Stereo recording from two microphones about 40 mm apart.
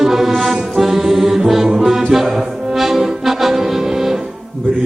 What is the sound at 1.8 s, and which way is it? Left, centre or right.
Music, centre.